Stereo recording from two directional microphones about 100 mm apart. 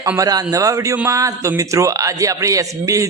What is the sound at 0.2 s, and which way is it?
A man's voice, 35° right (ahead or behind).